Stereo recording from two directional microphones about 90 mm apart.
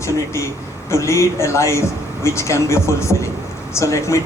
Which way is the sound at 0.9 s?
35° left (ahead or behind).